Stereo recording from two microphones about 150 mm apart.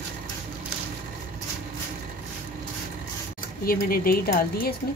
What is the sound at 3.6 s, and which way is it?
Speech, 75° left (ahead or behind).